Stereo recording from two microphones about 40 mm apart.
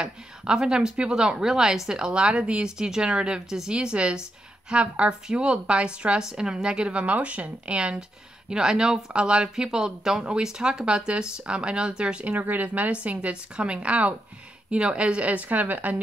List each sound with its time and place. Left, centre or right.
0.0 s speech: centre
8.5 s speech: centre
12.4 s speech: right